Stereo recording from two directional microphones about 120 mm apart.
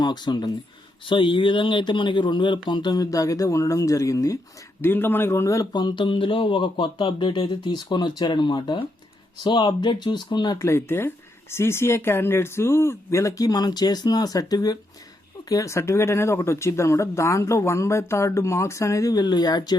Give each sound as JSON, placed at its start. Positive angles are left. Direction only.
{"t": 0.0, "sound": "speech", "side_deg": 35}
{"t": 10.6, "sound": "speech", "side_deg": 20}